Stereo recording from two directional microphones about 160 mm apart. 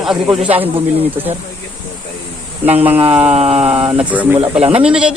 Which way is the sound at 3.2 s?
40° right (ahead or behind).